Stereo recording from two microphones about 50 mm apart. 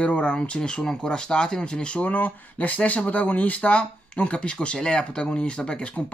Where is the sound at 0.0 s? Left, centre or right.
Left.